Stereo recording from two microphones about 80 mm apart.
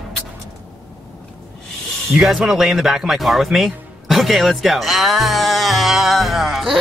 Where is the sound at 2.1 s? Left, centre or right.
Centre.